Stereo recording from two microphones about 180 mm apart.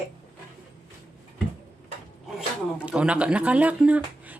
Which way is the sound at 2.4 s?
5° right (ahead or behind).